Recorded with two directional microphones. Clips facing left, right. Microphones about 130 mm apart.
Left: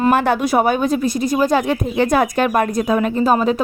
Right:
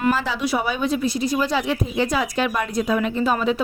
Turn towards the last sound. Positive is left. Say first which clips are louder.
# left 5 dB
turn(degrees=45)  # may be behind; listen again after turning